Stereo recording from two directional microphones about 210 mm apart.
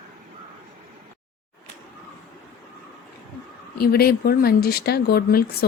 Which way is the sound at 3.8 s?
45° left (ahead or behind).